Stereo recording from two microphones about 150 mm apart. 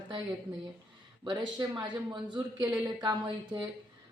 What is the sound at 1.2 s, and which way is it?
A man's voice, 30° right (ahead or behind).